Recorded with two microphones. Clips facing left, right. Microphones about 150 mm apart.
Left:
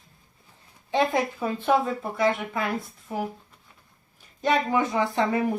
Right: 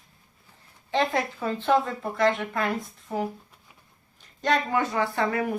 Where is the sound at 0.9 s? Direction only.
15° left (ahead or behind).